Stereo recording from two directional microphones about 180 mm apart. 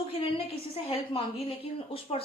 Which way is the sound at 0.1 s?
30° left (ahead or behind).